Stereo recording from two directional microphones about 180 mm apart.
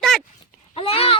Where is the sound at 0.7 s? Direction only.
30° left (ahead or behind).